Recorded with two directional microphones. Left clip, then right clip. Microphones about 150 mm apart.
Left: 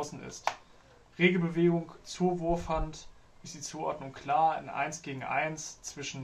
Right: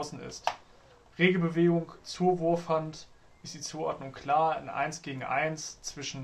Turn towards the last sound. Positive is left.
turn(degrees=-40)  # may be behind; listen again after turning